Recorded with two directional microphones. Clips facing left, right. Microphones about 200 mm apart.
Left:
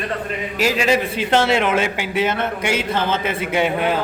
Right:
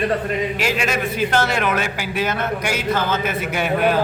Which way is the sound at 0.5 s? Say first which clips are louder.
Left 4 dB; 35° left (ahead or behind).